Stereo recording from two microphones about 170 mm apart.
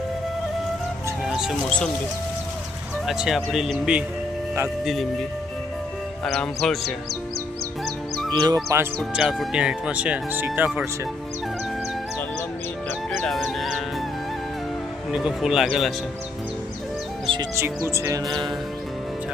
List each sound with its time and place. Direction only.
1.2 s speech: 5° right (ahead or behind)
3.1 s speech: centre (ahead or behind)
6.2 s speech: centre (ahead or behind)
8.3 s music: 25° right (ahead or behind)
9.1 s speech: 5° right (ahead or behind)
13.1 s music: centre (ahead or behind)
15.1 s speech: 5° right (ahead or behind)
17.3 s music: 30° right (ahead or behind)
17.8 s music: 15° right (ahead or behind)